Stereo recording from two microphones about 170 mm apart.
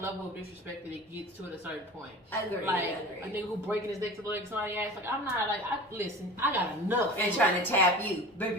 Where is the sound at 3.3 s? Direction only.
15° right (ahead or behind).